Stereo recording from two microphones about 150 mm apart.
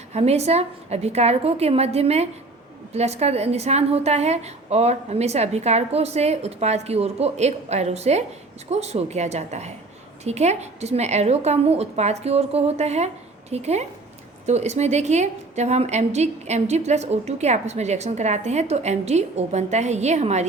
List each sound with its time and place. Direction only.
0.1 s a woman's voice: 45° right (ahead or behind)